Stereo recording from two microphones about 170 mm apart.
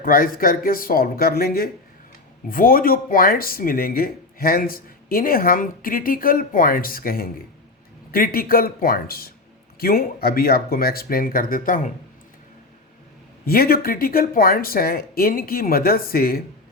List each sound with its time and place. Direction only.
0.0 s speech: 60° left (ahead or behind)
13.4 s speech: 60° left (ahead or behind)